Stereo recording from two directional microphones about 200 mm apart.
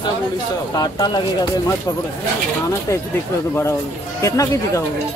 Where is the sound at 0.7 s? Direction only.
20° left (ahead or behind).